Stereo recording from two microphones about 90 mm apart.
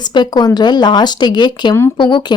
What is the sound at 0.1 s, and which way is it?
Speech, 50° left (ahead or behind).